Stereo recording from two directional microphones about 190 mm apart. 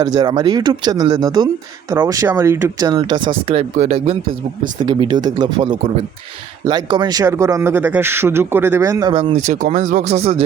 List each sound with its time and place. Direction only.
0.0 s a man's voice: 20° right (ahead or behind)
9.3 s speech: 40° right (ahead or behind)